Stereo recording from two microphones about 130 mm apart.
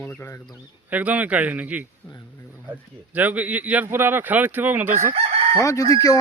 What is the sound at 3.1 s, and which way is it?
Speech, 10° right (ahead or behind).